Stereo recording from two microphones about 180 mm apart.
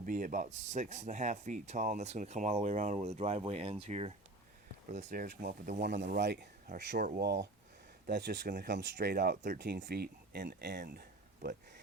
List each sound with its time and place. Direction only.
0.0 s speech: 45° right (ahead or behind)
5.0 s speech: 55° right (ahead or behind)
5.9 s speech: 70° right (ahead or behind)
7.0 s speech: 55° right (ahead or behind)
8.0 s speech: 75° right (ahead or behind); by 9.6 s 50° right (ahead or behind)
9.6 s speech: 70° right (ahead or behind)